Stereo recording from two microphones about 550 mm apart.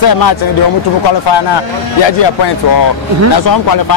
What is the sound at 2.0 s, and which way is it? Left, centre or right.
Speech, left.